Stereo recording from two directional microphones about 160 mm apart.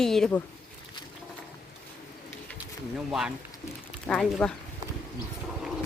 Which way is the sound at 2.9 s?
5° right (ahead or behind).